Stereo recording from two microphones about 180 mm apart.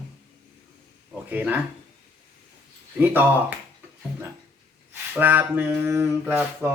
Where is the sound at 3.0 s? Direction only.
10° right (ahead or behind).